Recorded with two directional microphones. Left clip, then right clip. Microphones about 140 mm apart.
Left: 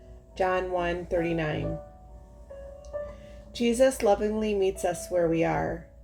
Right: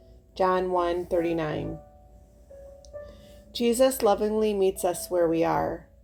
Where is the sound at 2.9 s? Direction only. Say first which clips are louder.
Left 6 dB; 30° left (ahead or behind).